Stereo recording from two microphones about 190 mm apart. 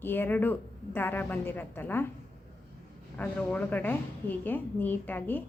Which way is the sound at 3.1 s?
5° left (ahead or behind).